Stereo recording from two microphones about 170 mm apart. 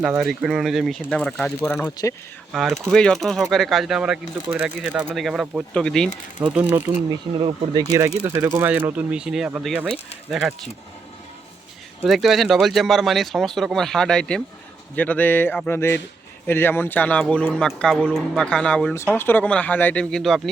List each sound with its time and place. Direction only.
0.0 s speech: 5° right (ahead or behind)
6.4 s speech: 5° right (ahead or behind)
6.9 s speech: 25° right (ahead or behind); by 10.5 s 5° right (ahead or behind)
12.0 s speech: centre (ahead or behind)